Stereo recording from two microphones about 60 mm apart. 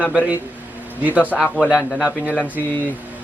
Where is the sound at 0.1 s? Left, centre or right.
Right.